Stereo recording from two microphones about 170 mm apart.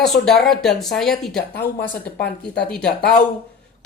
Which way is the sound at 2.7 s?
5° left (ahead or behind).